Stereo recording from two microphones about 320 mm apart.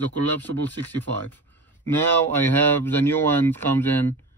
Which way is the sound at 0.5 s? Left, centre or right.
Right.